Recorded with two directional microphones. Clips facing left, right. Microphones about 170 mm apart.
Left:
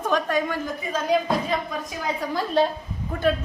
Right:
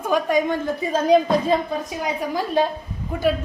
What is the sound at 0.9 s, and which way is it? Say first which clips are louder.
Speech: right 6 dB; 30° right (ahead or behind).